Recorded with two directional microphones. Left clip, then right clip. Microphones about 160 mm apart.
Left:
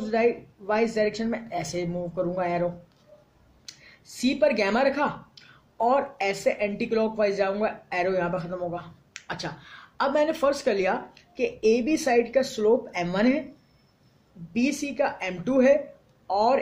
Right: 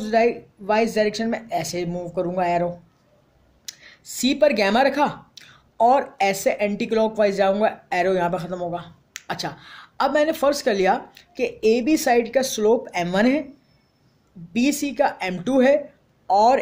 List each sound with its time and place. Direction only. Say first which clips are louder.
0.0 s speech: right 4 dB; 50° right (ahead or behind)
14.5 s speech: right 5 dB; 55° right (ahead or behind)